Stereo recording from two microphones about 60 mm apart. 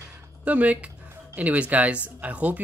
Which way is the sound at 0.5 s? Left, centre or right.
Right.